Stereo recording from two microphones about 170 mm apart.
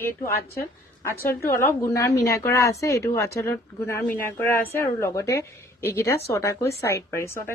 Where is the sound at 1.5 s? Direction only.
15° left (ahead or behind).